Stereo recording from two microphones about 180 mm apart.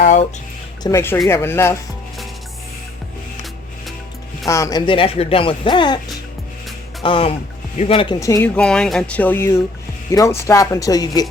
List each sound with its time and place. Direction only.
0.0 s speech: 40° left (ahead or behind)
0.8 s speech: 20° left (ahead or behind)
4.4 s speech: 15° left (ahead or behind)
7.0 s speech: 30° left (ahead or behind)
8.5 s speech: 5° left (ahead or behind); by 11.3 s 20° left (ahead or behind)